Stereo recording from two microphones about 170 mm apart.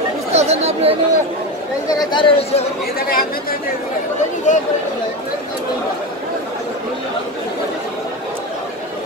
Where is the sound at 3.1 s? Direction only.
60° left (ahead or behind).